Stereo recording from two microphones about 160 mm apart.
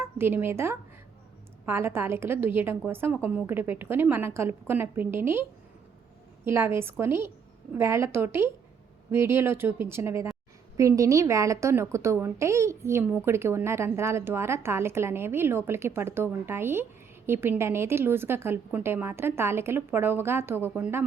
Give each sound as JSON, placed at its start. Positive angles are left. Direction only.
{"t": 0.0, "sound": "a woman's voice", "side_deg": -15}